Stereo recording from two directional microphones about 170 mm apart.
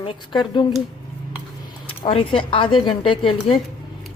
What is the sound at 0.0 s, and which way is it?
Speech, 30° left (ahead or behind).